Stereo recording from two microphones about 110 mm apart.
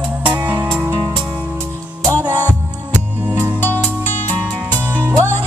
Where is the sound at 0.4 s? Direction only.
15° right (ahead or behind).